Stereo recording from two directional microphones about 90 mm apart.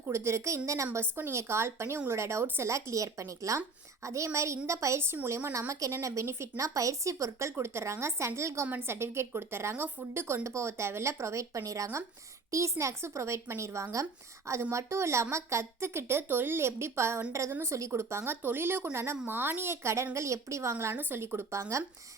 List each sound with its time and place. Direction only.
0.1 s speech: 30° right (ahead or behind)